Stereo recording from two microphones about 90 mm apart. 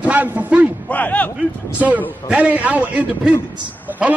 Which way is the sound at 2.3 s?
15° right (ahead or behind).